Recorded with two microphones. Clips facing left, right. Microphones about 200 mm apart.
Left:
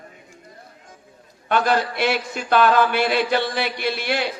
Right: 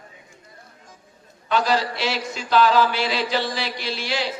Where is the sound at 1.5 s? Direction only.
55° left (ahead or behind).